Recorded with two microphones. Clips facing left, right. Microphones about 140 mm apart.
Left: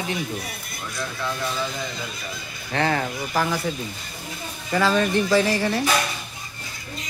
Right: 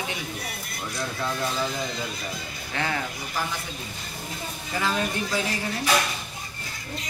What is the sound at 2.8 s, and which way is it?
Speech, 45° left (ahead or behind).